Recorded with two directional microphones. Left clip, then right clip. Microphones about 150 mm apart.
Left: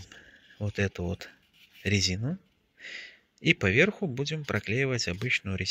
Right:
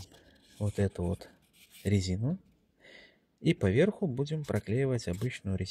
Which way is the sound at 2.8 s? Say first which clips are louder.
Left 13 dB; 25° right (ahead or behind).